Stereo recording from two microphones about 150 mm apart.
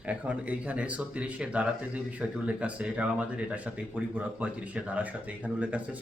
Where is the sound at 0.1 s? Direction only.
10° right (ahead or behind).